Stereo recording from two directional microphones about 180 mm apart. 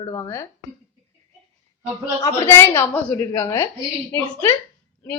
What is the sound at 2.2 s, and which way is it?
A woman's voice, 15° left (ahead or behind).